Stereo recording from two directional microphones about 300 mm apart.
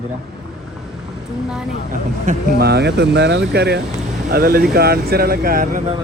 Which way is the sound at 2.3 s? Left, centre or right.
Right.